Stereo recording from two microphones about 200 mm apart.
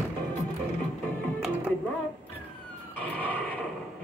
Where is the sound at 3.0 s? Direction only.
10° left (ahead or behind).